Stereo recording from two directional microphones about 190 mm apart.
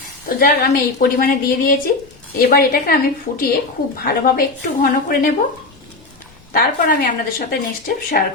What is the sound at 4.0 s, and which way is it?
A woman's voice, 50° left (ahead or behind).